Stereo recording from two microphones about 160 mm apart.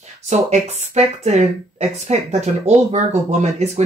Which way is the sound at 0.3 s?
45° right (ahead or behind).